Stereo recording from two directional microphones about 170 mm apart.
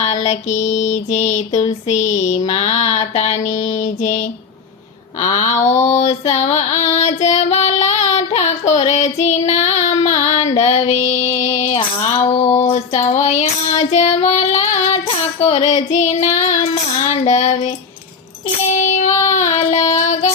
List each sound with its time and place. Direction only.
0.0 s a sound: 40° left (ahead or behind)
5.6 s child singing: 40° left (ahead or behind)
10.6 s female singing: 40° left (ahead or behind)
11.8 s a sound: 35° left (ahead or behind)
15.4 s child singing: 35° left (ahead or behind)
18.7 s child singing: 45° left (ahead or behind)